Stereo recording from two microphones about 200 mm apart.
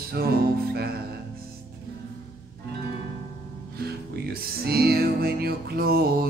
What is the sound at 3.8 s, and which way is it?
Music, 50° right (ahead or behind).